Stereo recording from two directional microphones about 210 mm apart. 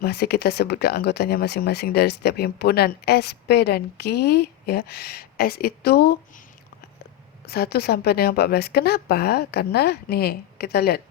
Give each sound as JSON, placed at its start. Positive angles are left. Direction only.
{"t": 0.0, "sound": "speech", "side_deg": 50}
{"t": 7.4, "sound": "speech", "side_deg": 50}